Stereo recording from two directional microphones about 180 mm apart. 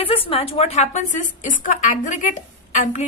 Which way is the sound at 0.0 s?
30° left (ahead or behind).